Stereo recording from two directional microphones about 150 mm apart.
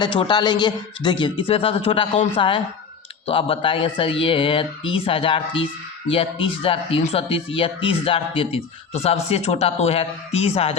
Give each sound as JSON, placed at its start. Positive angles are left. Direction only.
{"t": 0.0, "sound": "speech", "side_deg": 30}